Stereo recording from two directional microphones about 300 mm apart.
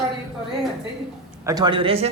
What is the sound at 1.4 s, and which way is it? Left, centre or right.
Speech, centre.